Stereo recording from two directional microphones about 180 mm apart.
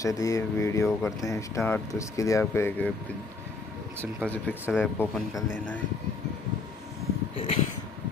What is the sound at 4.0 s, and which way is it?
Speech, 10° right (ahead or behind).